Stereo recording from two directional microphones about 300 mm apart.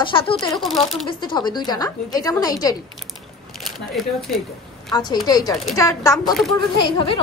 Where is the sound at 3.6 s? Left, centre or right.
Centre.